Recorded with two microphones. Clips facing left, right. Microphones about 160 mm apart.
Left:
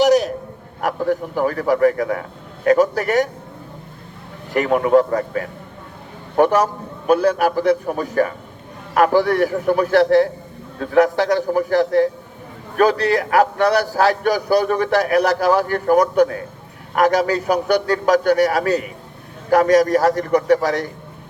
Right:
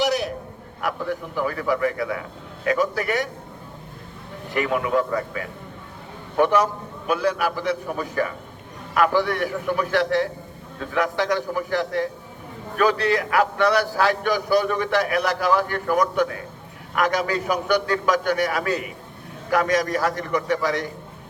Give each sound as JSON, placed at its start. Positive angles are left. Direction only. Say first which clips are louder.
{"t": 0.0, "sound": "a sound", "louder": "left 8 dB", "side_deg": 40}
{"t": 0.8, "sound": "a man's voice", "louder": "left 7 dB", "side_deg": 45}
{"t": 4.5, "sound": "a man's voice", "louder": "left 7 dB", "side_deg": 45}